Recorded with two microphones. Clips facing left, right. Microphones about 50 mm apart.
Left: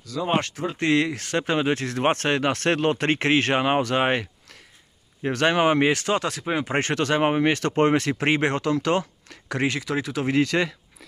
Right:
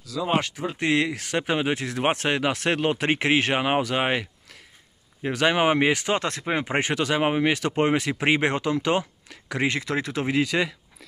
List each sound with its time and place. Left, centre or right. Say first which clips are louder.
0.4 s speech: left 1 dB; centre
6.1 s speech: left 1 dB; right
6.6 s speech: left 2 dB; centre
9.7 s speech: even; right
10.2 s speech: left 3 dB; centre